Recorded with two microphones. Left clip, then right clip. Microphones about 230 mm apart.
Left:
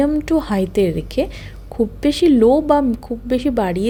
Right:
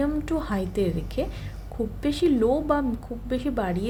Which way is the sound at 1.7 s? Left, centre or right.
Left.